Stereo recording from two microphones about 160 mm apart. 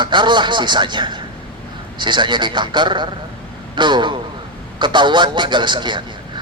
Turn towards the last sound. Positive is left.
turn(degrees=-30)  # may be behind; listen again after turning